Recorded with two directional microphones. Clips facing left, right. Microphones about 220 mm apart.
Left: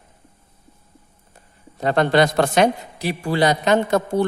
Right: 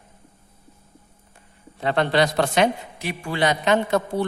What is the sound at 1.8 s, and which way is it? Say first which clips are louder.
A man's voice: left 3 dB; 45° left (ahead or behind).